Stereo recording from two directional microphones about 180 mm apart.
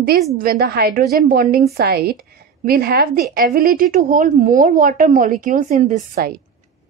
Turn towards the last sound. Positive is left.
turn(degrees=-55)  # may be behind; listen again after turning